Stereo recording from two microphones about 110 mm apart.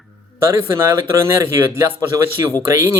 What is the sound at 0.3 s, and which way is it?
A man's voice, 25° right (ahead or behind).